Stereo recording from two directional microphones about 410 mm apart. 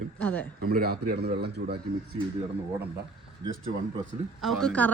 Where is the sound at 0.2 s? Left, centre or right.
Centre.